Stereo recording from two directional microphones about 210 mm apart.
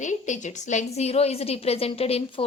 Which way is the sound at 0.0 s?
35° left (ahead or behind).